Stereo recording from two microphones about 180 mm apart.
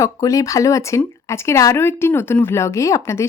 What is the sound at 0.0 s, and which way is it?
Speech, 20° left (ahead or behind).